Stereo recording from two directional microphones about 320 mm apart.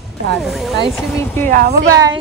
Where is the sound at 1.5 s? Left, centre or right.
Right.